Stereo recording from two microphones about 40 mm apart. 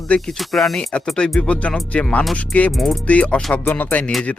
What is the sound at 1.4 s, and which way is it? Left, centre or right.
Speech, left.